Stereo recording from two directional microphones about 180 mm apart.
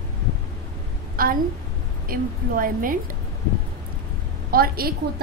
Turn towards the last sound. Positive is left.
turn(degrees=-55)  # may be behind; listen again after turning